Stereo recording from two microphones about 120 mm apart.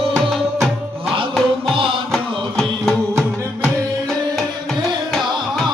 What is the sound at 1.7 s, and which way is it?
Music, 45° right (ahead or behind).